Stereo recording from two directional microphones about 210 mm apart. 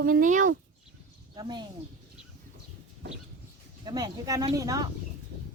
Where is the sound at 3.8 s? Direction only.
20° right (ahead or behind).